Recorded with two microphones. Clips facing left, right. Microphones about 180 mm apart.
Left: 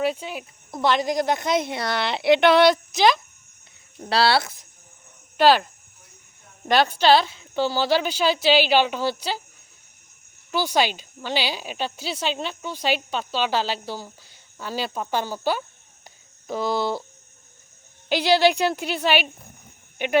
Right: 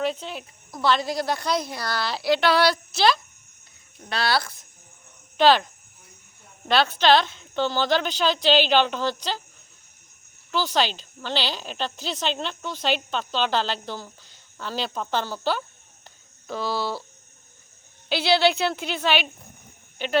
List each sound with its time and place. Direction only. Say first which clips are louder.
0.0 s a woman's voice: left 2 dB; 10° left (ahead or behind)
4.1 s a woman's voice: left 5 dB; 30° left (ahead or behind)
5.4 s speech: left 1 dB; 10° left (ahead or behind)
6.7 s speech: left 2 dB; 15° left (ahead or behind)
10.5 s speech: left 2 dB; 10° left (ahead or behind)
16.0 s a sound: left 3 dB; 15° left (ahead or behind)
18.1 s speech: left 2 dB; 15° left (ahead or behind)